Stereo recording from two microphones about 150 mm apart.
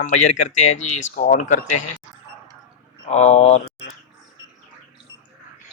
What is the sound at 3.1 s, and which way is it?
Speech, 50° left (ahead or behind).